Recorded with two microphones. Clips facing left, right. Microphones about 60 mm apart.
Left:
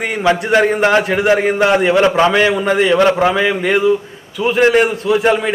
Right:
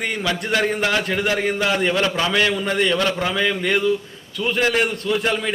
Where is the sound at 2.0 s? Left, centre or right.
Left; by 5.3 s centre.